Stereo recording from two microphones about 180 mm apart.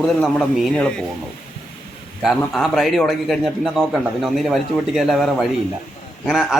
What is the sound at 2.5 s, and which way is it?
A man's voice, centre (ahead or behind).